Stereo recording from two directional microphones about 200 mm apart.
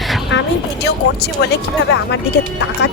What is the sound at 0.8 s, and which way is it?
Speech, 55° left (ahead or behind).